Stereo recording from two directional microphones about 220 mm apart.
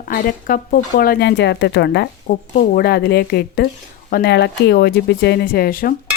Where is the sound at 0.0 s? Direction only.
40° left (ahead or behind).